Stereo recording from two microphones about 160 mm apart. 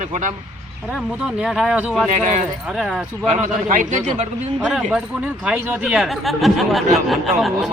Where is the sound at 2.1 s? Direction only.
50° right (ahead or behind).